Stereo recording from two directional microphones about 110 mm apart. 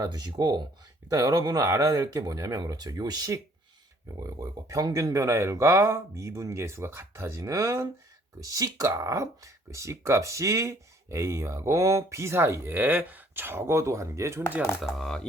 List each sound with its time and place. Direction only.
0.0 s speech: 40° right (ahead or behind)
14.8 s speech: centre (ahead or behind)